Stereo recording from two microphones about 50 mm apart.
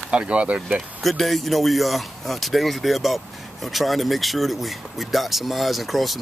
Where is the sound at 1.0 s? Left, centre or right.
Centre.